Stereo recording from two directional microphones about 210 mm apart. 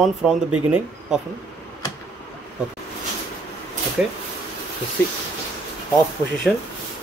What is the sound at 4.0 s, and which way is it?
Speech, 5° right (ahead or behind).